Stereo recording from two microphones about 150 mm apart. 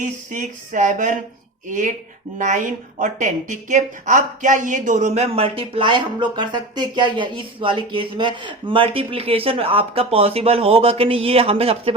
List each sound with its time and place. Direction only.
0.0 s a woman's voice: 55° right (ahead or behind); by 11.9 s 40° right (ahead or behind)